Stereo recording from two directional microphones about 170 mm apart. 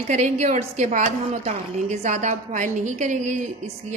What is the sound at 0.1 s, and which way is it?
Speech, 45° right (ahead or behind).